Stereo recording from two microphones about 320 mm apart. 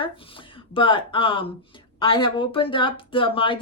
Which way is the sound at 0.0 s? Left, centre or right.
Centre.